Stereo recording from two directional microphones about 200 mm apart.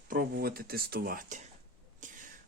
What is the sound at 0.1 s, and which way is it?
Speech, 50° right (ahead or behind).